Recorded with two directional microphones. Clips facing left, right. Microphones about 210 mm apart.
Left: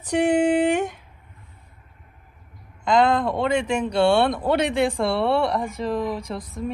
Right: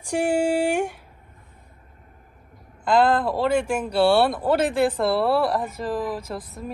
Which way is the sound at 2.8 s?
5° right (ahead or behind).